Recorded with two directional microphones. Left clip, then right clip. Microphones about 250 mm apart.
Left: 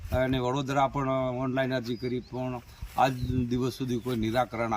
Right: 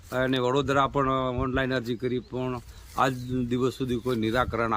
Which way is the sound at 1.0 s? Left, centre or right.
Centre.